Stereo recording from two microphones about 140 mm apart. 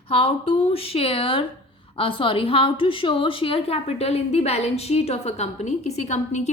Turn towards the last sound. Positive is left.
turn(degrees=55)  # may be behind; listen again after turning